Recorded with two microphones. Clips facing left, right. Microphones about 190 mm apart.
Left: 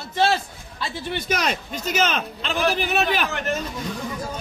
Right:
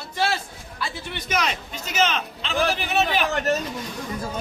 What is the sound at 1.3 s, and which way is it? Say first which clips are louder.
A man's voice: right 1 dB; 40° left (ahead or behind).